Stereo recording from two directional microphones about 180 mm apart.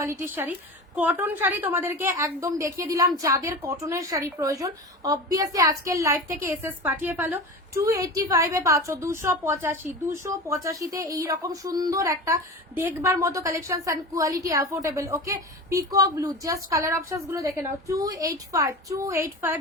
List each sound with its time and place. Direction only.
0.0 s a woman's voice: 15° right (ahead or behind)